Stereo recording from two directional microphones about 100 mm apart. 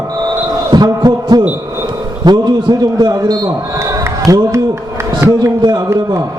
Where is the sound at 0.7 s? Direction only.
45° right (ahead or behind).